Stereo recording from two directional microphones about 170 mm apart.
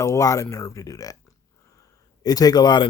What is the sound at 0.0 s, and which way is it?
Speech, 20° left (ahead or behind).